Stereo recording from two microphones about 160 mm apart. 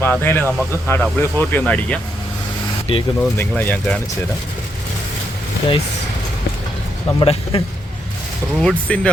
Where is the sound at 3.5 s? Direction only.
10° left (ahead or behind).